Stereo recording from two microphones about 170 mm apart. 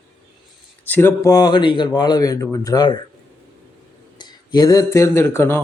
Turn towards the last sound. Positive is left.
turn(degrees=15)  # may be behind; listen again after turning